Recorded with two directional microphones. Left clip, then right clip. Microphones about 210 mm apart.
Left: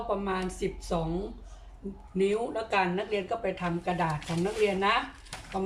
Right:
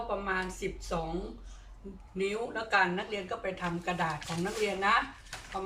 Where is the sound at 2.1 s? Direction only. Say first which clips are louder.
Left 5 dB; 20° left (ahead or behind).